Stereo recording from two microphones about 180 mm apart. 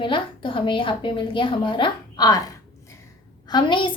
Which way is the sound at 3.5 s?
25° left (ahead or behind).